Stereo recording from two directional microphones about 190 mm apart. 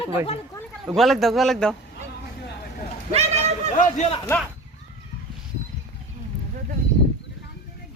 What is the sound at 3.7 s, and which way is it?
Speech, 40° left (ahead or behind).